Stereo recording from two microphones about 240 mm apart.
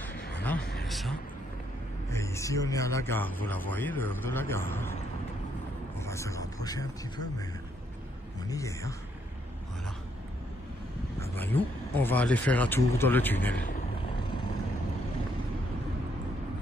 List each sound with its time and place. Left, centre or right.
0.6 s vehicle: left
0.8 s speech: centre
2.0 s speech: centre
5.9 s speech: centre
11.1 s speech: centre